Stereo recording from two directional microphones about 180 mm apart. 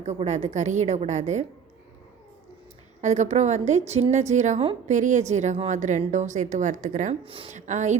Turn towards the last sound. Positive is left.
turn(degrees=-40)  # may be behind; listen again after turning